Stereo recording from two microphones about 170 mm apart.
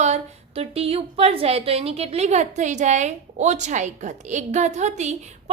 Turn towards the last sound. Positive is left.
turn(degrees=-40)  # may be behind; listen again after turning